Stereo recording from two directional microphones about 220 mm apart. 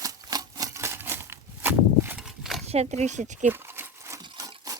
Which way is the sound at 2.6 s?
30° right (ahead or behind).